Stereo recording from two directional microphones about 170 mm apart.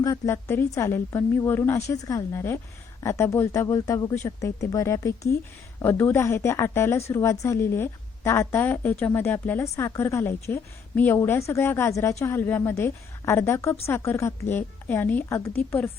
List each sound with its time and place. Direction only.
0.0 s a woman's voice: 15° left (ahead or behind)